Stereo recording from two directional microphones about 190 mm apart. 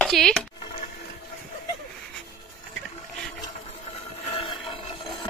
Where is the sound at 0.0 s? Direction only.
5° left (ahead or behind).